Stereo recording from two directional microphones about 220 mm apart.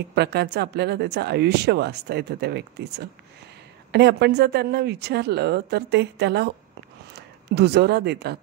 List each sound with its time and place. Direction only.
0.1 s speech: 50° right (ahead or behind)